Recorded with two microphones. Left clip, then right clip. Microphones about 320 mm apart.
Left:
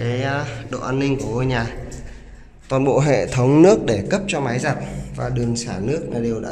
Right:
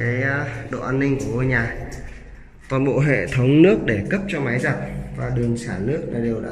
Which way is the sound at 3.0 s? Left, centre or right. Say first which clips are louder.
Left 3 dB; left.